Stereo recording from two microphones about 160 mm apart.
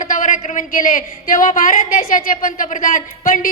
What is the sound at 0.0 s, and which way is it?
A woman's voice, 55° left (ahead or behind).